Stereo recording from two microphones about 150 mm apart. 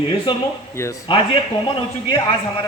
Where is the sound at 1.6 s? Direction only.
35° left (ahead or behind).